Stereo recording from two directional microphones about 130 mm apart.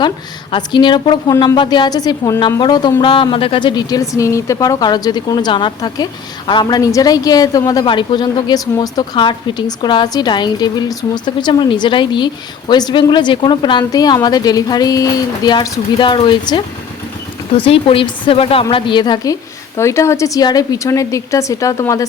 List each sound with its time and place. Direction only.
0.5 s a woman's voice: 35° left (ahead or behind)
17.7 s a woman's voice: 45° left (ahead or behind); by 22.0 s 25° left (ahead or behind)